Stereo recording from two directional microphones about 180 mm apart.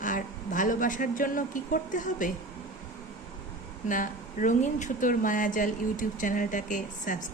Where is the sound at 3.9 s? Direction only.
45° left (ahead or behind).